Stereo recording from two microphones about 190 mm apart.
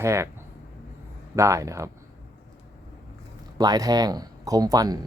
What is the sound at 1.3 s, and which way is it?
Speech, 15° right (ahead or behind).